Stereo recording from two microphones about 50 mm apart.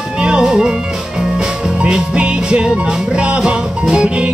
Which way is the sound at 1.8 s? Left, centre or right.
Centre.